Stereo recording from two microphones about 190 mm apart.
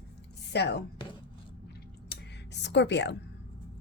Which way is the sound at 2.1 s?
60° left (ahead or behind).